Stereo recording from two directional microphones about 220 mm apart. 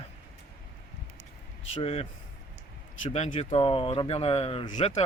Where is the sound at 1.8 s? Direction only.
30° left (ahead or behind).